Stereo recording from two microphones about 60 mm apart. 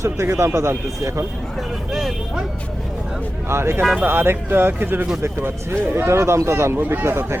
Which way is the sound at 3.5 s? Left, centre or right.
Right.